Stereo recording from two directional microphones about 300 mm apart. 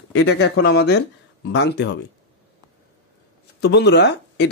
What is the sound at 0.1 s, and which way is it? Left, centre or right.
A man's voice, left.